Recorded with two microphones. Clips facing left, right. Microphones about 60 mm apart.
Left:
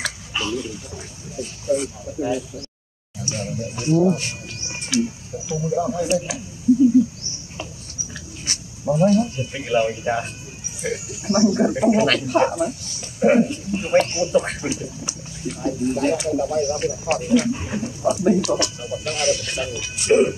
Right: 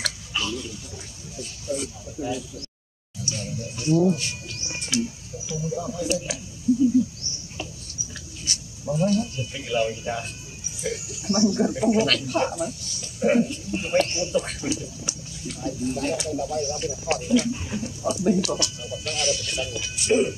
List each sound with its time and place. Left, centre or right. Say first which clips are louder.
0.3 s a sound: left 5 dB; left
1.3 s speech: left 8 dB; left
8.5 s speech: left 6 dB; left
19.4 s speech: left 3 dB; left
20.0 s speech: left 5 dB; left